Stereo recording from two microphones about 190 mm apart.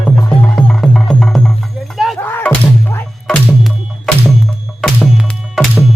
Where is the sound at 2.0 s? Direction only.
Centre (ahead or behind).